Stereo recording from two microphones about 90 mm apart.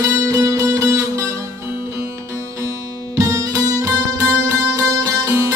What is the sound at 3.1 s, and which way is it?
Music, 40° right (ahead or behind).